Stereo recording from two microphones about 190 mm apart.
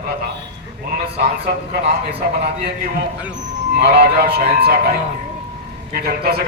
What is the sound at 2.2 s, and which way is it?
Speech, 55° right (ahead or behind).